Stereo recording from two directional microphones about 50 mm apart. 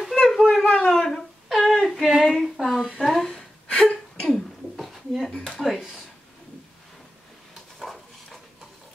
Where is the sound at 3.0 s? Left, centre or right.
Centre.